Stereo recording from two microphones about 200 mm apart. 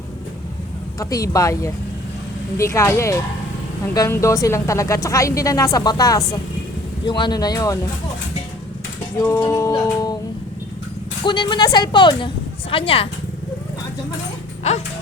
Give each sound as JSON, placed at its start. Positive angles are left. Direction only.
{"t": 0.9, "sound": "a woman's voice", "side_deg": 15}
{"t": 9.2, "sound": "a woman's voice", "side_deg": 15}
{"t": 11.3, "sound": "speech", "side_deg": 25}